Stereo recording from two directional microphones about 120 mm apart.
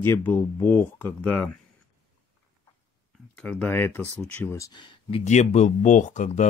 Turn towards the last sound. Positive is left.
turn(degrees=85)